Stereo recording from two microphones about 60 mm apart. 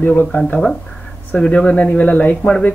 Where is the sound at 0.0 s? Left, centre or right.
Left.